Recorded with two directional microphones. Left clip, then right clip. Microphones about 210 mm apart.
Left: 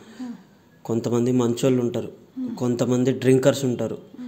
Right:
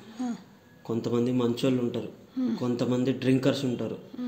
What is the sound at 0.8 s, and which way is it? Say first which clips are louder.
Speech: left 5 dB; 55° left (ahead or behind).